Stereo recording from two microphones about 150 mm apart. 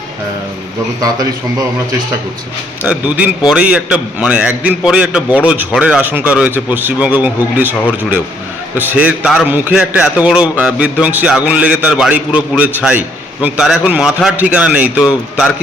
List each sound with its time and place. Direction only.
1.0 s a man's voice: 25° right (ahead or behind)
2.8 s a man's voice: 10° right (ahead or behind)